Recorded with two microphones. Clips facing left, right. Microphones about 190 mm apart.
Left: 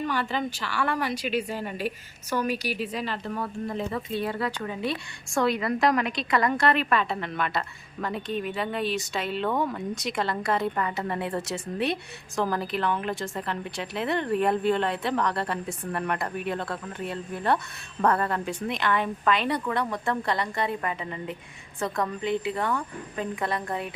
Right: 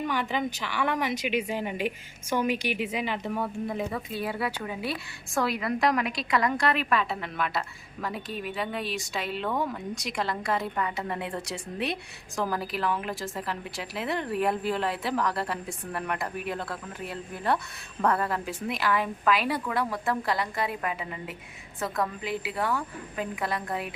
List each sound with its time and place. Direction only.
0.0 s a woman's voice: 15° right (ahead or behind)
11.1 s speech: 35° left (ahead or behind)
11.4 s a woman's voice: centre (ahead or behind)